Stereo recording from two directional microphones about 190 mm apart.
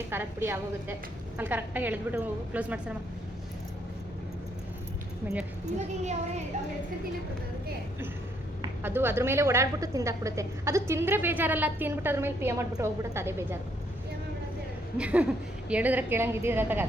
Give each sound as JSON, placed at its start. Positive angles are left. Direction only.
{"t": 0.1, "sound": "a woman's voice", "side_deg": -10}
{"t": 5.2, "sound": "a woman's voice", "side_deg": -10}
{"t": 6.0, "sound": "a child's voice", "side_deg": -35}
{"t": 8.8, "sound": "a woman's voice", "side_deg": -10}
{"t": 14.9, "sound": "a woman's voice", "side_deg": -5}